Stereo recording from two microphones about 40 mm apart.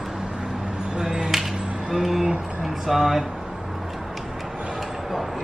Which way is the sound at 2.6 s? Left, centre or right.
Centre.